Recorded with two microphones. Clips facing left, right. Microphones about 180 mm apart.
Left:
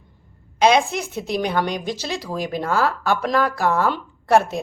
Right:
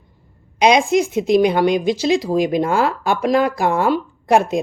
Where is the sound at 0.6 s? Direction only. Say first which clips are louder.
Right 3 dB; 15° right (ahead or behind).